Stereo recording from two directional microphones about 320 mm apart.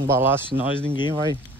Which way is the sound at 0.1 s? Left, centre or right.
Centre.